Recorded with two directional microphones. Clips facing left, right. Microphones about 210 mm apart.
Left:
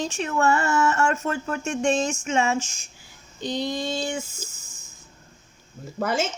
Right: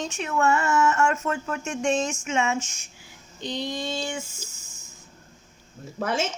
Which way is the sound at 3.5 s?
40° left (ahead or behind).